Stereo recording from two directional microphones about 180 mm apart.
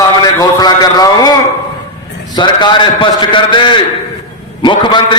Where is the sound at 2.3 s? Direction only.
25° left (ahead or behind).